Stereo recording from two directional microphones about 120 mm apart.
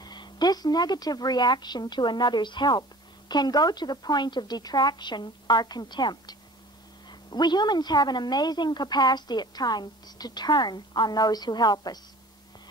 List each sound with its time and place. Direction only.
0.0 s speech: 35° left (ahead or behind)